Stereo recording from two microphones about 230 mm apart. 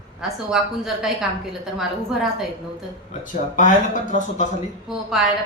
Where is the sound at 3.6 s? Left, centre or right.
Left.